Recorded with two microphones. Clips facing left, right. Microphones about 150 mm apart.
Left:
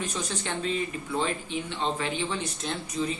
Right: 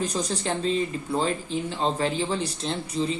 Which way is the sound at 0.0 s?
35° right (ahead or behind).